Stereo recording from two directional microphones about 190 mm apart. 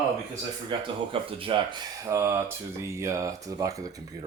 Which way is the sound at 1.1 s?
30° right (ahead or behind).